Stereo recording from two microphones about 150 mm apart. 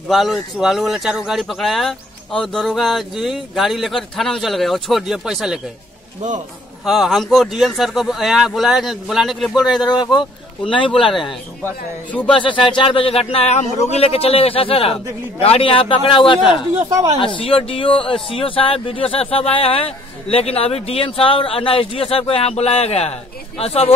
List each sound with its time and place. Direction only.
0.1 s speech: centre (ahead or behind)
6.8 s speech: centre (ahead or behind)
9.6 s speech: 25° left (ahead or behind)
12.3 s speech: 35° left (ahead or behind)